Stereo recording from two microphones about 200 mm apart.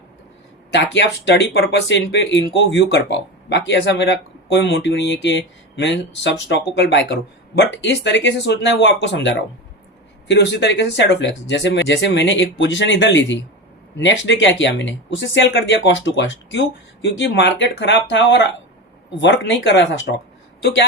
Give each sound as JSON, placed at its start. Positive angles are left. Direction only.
{"t": 0.7, "sound": "speech", "side_deg": 65}